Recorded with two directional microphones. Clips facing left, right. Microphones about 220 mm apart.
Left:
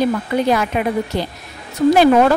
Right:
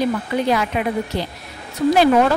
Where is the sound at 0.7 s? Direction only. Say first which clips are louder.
Left 2 dB; 50° left (ahead or behind).